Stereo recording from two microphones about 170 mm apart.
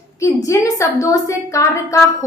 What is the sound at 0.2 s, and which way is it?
A woman's voice, 20° left (ahead or behind).